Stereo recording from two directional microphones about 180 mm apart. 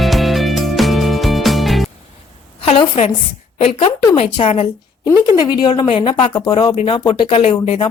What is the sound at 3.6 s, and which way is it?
Speech, 35° left (ahead or behind).